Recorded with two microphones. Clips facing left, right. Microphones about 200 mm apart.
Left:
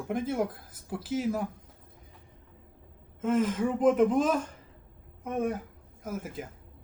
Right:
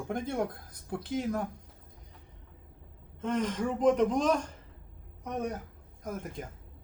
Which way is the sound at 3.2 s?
5° left (ahead or behind).